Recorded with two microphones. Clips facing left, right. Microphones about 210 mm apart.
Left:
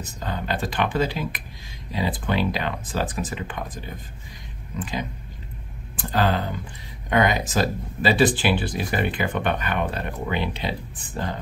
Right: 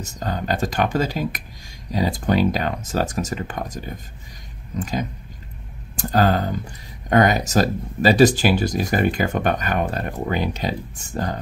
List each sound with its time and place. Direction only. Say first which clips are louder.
0.0 s speech: right 3 dB; 45° right (ahead or behind)